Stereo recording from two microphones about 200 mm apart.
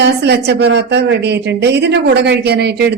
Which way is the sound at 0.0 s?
55° right (ahead or behind).